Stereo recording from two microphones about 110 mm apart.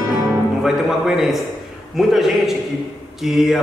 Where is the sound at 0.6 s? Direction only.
5° right (ahead or behind).